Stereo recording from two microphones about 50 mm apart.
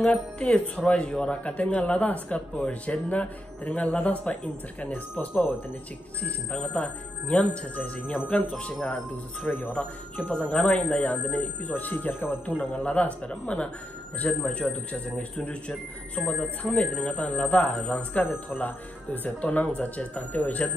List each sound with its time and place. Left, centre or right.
0.0 s speech: centre; by 9.8 s left
9.8 s speech: left
16.2 s speech: centre
16.6 s speech: left